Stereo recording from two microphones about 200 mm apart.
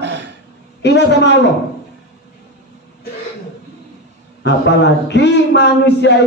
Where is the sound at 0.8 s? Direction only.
60° left (ahead or behind).